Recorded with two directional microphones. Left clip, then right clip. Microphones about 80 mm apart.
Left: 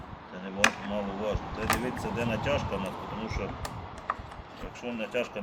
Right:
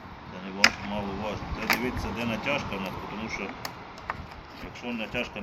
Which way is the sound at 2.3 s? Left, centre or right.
Left.